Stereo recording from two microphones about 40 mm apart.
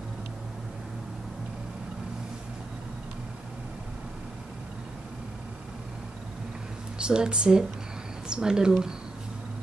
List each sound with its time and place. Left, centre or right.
7.0 s speech: right